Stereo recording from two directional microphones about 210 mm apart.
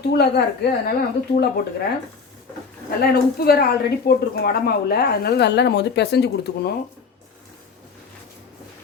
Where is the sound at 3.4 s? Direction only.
45° left (ahead or behind).